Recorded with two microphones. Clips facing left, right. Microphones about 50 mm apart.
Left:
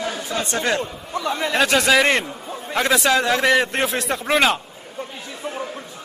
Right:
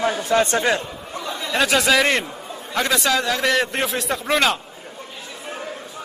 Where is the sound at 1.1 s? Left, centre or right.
Left.